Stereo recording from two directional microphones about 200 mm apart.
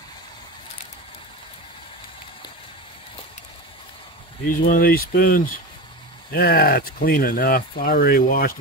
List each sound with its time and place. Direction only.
4.5 s speech: 45° left (ahead or behind)